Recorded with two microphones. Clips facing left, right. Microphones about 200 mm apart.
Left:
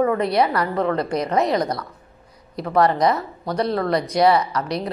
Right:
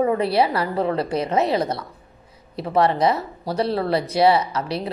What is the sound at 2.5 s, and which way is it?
A woman's voice, 30° right (ahead or behind).